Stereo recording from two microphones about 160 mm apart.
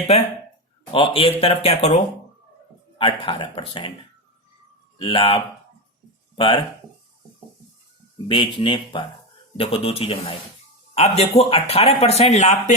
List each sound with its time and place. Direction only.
0.9 s speech: 35° left (ahead or behind)
3.0 s speech: 30° left (ahead or behind)
4.9 s speech: 35° left (ahead or behind)
8.3 s speech: 30° left (ahead or behind)